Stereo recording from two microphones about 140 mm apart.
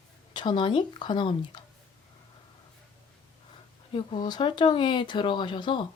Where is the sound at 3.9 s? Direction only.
35° left (ahead or behind).